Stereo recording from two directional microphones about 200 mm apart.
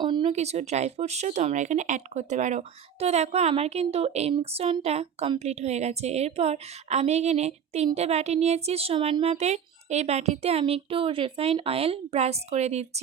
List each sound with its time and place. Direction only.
0.0 s speech: 25° right (ahead or behind)